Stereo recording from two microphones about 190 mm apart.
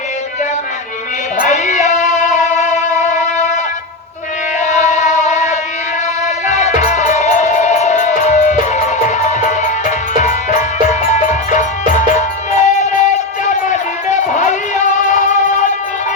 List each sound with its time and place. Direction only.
1.4 s music: 40° left (ahead or behind)
4.6 s a sound: 40° left (ahead or behind)
6.2 s music: 35° left (ahead or behind)